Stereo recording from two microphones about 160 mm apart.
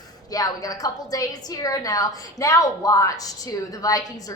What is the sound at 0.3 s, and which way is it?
A woman's voice, 20° left (ahead or behind).